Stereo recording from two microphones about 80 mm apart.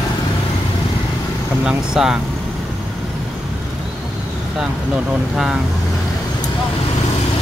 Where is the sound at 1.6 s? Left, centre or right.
Centre.